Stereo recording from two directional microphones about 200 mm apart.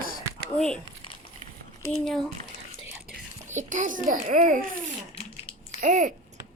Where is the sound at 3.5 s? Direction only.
40° right (ahead or behind).